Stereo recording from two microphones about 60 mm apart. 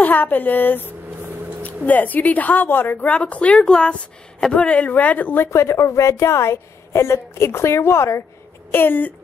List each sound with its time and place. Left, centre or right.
0.0 s a woman's voice: left
3.1 s a woman's voice: left
5.5 s a woman's voice: left
8.7 s speech: left